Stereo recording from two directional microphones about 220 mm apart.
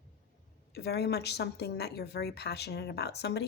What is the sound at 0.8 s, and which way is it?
Speech, 50° left (ahead or behind).